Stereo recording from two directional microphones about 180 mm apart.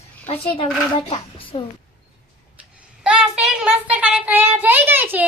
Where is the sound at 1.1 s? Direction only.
30° left (ahead or behind).